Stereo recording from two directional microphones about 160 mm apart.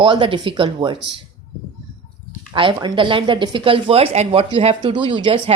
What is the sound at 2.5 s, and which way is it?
Speech, 30° right (ahead or behind).